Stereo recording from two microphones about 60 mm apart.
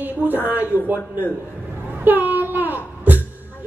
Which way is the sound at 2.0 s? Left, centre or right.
Right.